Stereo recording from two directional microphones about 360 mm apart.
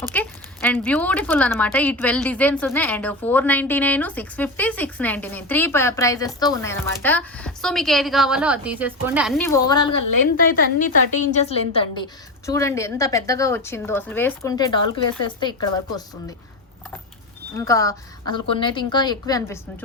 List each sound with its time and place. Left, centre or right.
0.1 s speech: centre
11.2 s a woman's voice: centre
17.5 s a woman's voice: centre